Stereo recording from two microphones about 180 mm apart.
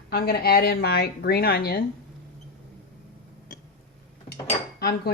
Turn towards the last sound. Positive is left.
turn(degrees=60)  # may be behind; listen again after turning